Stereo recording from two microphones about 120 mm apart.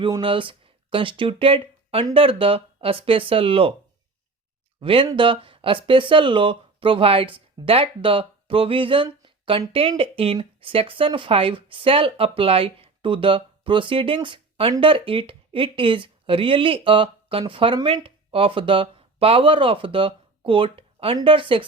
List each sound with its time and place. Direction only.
0.2 s speech: 45° right (ahead or behind)
4.8 s speech: 50° right (ahead or behind)